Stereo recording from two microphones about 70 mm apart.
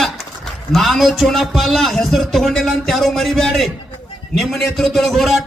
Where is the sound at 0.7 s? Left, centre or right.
Centre.